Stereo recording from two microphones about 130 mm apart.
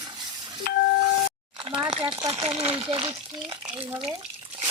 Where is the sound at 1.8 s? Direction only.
35° right (ahead or behind).